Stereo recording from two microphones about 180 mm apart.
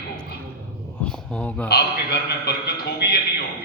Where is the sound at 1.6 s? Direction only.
65° left (ahead or behind).